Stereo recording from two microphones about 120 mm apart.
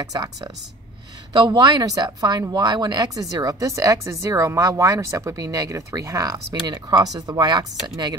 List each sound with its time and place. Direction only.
0.0 s a woman's voice: 30° right (ahead or behind)